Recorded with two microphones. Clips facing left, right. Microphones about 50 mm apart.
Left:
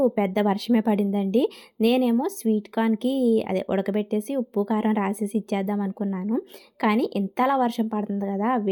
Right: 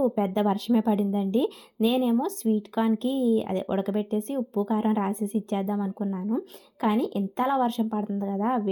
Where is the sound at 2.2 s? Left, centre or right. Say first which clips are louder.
Left 2 dB; left.